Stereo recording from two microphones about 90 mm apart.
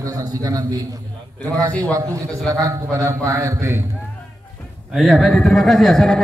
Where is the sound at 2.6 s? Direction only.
35° right (ahead or behind).